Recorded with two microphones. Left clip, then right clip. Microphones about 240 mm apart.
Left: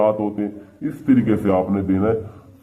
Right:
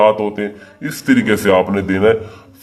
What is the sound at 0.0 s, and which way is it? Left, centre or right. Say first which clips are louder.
A man's voice: right 6 dB; centre.